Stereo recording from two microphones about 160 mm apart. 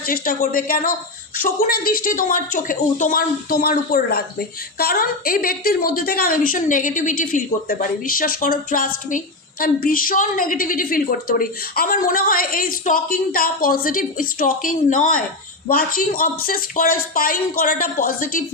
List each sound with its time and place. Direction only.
0.0 s a woman's voice: 65° left (ahead or behind)